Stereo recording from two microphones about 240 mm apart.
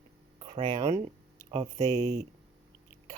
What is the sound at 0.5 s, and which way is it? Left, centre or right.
Speech, centre.